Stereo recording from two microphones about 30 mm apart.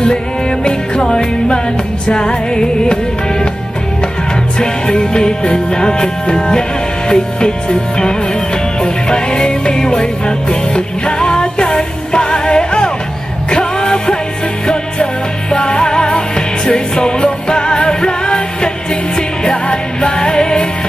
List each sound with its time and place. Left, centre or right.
0.7 s music: left
4.6 s music: left
5.7 s speech: left
7.1 s music: left
15.5 s music: left